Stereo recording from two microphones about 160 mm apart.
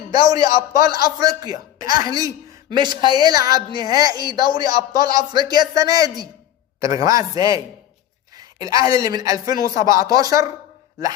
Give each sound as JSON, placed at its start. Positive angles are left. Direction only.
{"t": 0.1, "sound": "a man's voice", "side_deg": -25}